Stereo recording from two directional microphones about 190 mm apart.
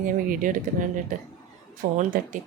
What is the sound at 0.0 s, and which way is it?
Speech, 45° right (ahead or behind).